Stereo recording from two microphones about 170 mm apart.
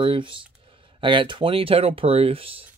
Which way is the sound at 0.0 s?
30° right (ahead or behind).